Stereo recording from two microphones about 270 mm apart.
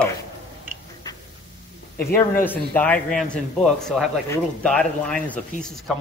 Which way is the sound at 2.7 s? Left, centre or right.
Centre.